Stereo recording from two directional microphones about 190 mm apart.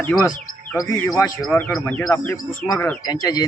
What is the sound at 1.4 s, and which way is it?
A man's voice, 5° left (ahead or behind).